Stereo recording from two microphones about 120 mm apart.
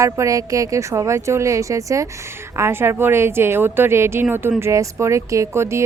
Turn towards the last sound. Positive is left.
turn(degrees=-20)  # may be behind; listen again after turning